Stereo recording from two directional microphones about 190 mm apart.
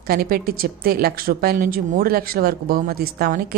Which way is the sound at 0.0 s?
50° right (ahead or behind).